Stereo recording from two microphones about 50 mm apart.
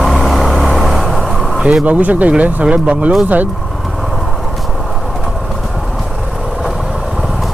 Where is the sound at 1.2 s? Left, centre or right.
Centre.